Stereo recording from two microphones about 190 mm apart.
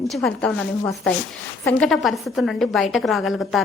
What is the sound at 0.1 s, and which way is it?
Speech, 5° left (ahead or behind).